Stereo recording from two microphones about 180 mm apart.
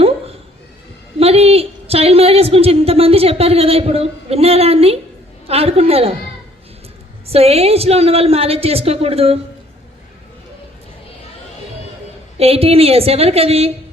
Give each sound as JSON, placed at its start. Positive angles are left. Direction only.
{"t": 1.2, "sound": "a woman's voice", "side_deg": -35}
{"t": 7.3, "sound": "a woman's voice", "side_deg": -35}
{"t": 12.4, "sound": "a woman's voice", "side_deg": -35}